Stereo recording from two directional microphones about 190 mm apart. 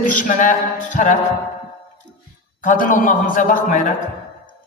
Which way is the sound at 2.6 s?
45° left (ahead or behind).